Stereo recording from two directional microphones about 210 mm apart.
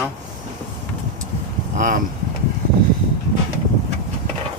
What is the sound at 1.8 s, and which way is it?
Speech, 40° right (ahead or behind).